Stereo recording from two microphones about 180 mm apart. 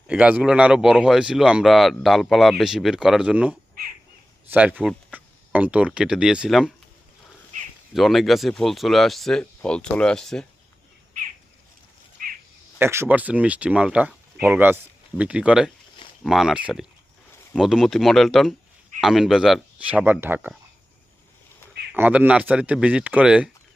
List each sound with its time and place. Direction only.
0.1 s speech: 10° right (ahead or behind)
7.9 s speech: centre (ahead or behind)
12.2 s crow: 50° right (ahead or behind)
12.8 s speech: 15° right (ahead or behind)
21.9 s speech: 10° right (ahead or behind)